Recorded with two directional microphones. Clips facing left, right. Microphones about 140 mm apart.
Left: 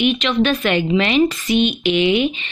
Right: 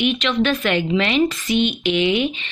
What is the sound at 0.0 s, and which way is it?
A woman's voice, 20° left (ahead or behind).